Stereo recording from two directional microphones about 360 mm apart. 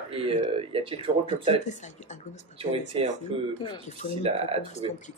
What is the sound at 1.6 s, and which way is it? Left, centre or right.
Speech, centre.